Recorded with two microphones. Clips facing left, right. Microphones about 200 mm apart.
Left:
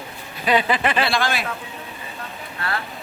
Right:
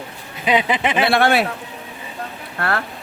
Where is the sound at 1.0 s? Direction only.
60° right (ahead or behind).